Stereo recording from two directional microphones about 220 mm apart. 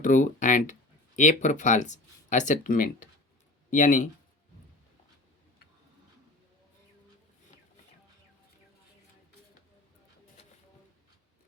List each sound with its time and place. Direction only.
0.0 s speech: 35° left (ahead or behind)